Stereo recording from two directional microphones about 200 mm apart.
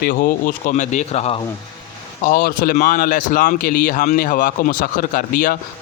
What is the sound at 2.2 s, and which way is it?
Speech, 45° left (ahead or behind).